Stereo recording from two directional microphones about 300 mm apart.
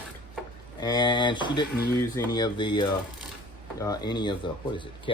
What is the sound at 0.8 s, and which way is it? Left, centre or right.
Speech, centre.